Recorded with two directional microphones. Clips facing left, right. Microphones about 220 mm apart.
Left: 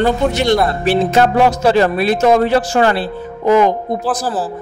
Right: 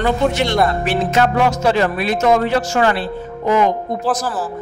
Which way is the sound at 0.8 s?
35° left (ahead or behind).